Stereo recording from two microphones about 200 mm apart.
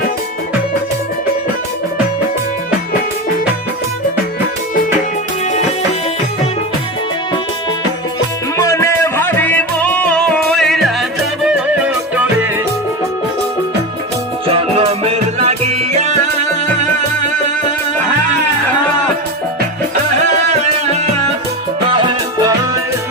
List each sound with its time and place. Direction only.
8.5 s music: 15° left (ahead or behind)
12.1 s music: 10° right (ahead or behind)
14.5 s music: 30° right (ahead or behind)
21.9 s music: 20° right (ahead or behind)